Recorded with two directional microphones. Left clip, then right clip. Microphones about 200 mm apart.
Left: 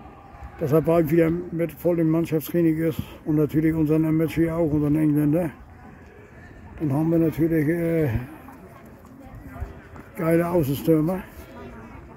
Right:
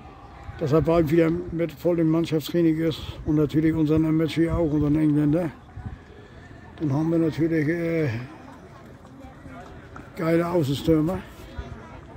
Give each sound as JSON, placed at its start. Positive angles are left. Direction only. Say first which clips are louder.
{"t": 0.6, "sound": "speech", "louder": "left 1 dB", "side_deg": -10}
{"t": 3.5, "sound": "speech", "louder": "even", "side_deg": 5}
{"t": 7.1, "sound": "speech", "louder": "left 2 dB", "side_deg": 15}
{"t": 10.1, "sound": "speech", "louder": "left 1 dB", "side_deg": 10}